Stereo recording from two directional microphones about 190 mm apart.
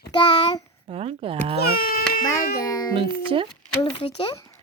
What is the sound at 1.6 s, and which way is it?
Cat, 50° left (ahead or behind).